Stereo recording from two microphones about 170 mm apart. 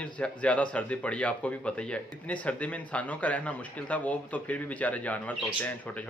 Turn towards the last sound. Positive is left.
turn(degrees=10)  # may be behind; listen again after turning